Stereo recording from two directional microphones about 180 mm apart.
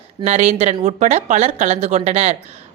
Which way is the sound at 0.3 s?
35° right (ahead or behind).